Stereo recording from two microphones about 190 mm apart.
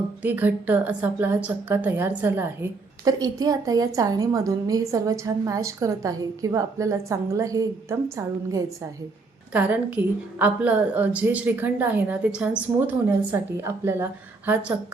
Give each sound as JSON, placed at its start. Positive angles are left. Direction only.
{"t": 0.2, "sound": "a woman's voice", "side_deg": -10}